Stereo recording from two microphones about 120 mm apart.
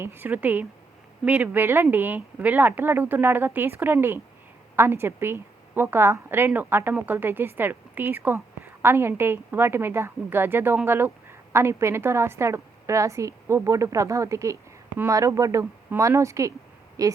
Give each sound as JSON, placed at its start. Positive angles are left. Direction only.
{"t": 0.0, "sound": "a woman's voice", "side_deg": -20}